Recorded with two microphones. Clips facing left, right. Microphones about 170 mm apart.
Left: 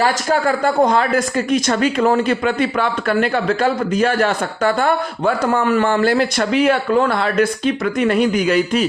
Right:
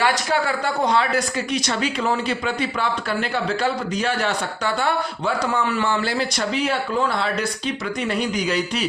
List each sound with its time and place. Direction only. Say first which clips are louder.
0.0 s speech: left 4 dB; 45° left (ahead or behind)